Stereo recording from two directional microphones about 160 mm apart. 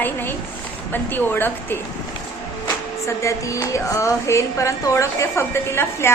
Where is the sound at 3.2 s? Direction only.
20° left (ahead or behind).